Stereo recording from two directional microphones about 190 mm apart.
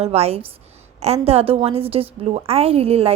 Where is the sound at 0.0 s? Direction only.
35° right (ahead or behind).